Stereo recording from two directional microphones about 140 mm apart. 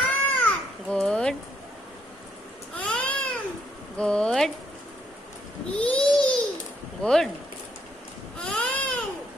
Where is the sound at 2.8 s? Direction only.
10° left (ahead or behind).